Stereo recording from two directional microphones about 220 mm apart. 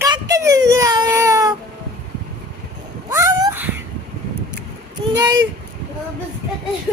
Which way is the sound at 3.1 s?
15° right (ahead or behind).